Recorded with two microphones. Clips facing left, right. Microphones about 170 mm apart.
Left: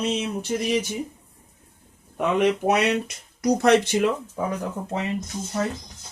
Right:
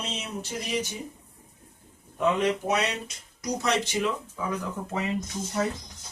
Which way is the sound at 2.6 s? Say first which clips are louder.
Left 6 dB; 60° left (ahead or behind).